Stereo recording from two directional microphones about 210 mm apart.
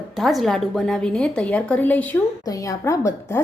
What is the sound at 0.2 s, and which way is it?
A woman's voice, centre (ahead or behind).